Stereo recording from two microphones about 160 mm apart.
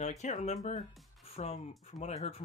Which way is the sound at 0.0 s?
45° left (ahead or behind).